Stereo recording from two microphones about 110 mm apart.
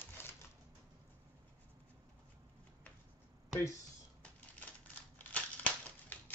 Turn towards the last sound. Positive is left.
turn(degrees=15)  # may be behind; listen again after turning